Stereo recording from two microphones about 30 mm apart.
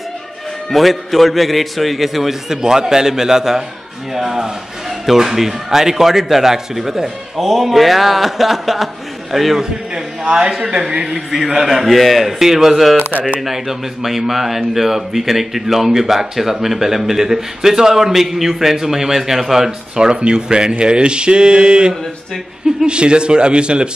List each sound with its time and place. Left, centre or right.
0.7 s a man's voice: centre
2.5 s a man's voice: right; by 9.6 s centre
9.6 s a man's voice: right
11.1 s a man's voice: centre
12.4 s speech: centre
20.2 s a man's voice: right